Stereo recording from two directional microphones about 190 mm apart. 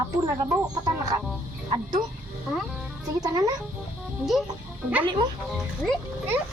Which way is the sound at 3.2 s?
20° right (ahead or behind).